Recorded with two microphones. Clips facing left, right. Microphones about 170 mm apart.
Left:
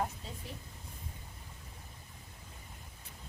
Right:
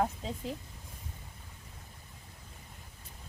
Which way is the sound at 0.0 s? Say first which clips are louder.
Right 6 dB; 90° right.